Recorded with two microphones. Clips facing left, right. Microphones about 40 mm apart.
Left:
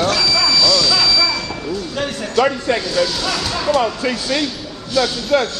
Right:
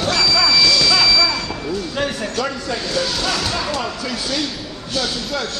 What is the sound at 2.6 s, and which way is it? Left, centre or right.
Speech, left.